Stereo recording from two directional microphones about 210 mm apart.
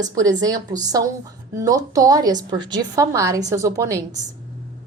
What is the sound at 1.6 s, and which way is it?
A woman's voice, 15° right (ahead or behind).